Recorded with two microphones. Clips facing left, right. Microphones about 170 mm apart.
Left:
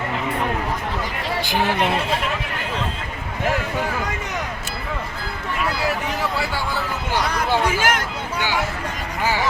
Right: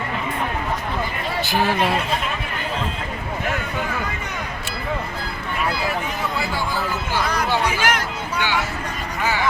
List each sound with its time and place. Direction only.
1.5 s speech: 20° left (ahead or behind)
7.6 s speech: 45° left (ahead or behind)